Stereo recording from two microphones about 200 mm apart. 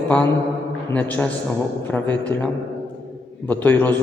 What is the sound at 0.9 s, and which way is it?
Speech, 10° left (ahead or behind).